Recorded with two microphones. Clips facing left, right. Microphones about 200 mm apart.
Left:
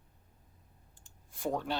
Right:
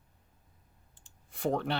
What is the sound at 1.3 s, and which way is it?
Speech, 65° right (ahead or behind).